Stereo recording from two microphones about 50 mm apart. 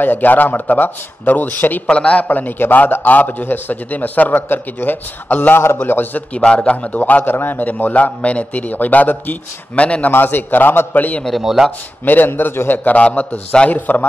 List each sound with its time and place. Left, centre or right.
0.0 s a man's voice: left
1.9 s a man's voice: left
2.2 s a man's voice: left
6.3 s a man's voice: left
7.9 s a man's voice: left
10.1 s a man's voice: left
11.4 s speech: centre
12.0 s a man's voice: left